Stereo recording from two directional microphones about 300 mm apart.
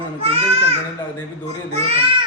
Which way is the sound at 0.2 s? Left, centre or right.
Centre.